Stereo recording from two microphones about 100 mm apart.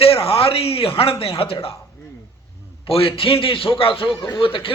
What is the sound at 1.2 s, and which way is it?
Speech, 70° left (ahead or behind).